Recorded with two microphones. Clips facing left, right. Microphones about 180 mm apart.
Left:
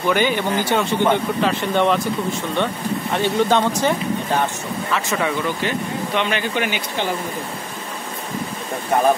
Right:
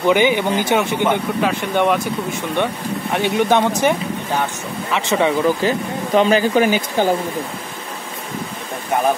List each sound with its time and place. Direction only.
0.0 s speech: 15° right (ahead or behind)
4.9 s speech: 20° right (ahead or behind)
5.6 s speech: 35° right (ahead or behind)